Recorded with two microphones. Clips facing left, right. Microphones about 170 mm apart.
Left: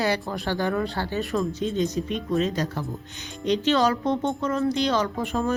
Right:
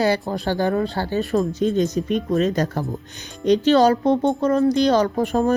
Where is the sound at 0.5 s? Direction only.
35° right (ahead or behind).